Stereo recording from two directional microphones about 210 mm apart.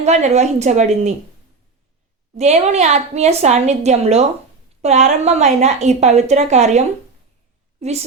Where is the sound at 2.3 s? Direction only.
30° right (ahead or behind).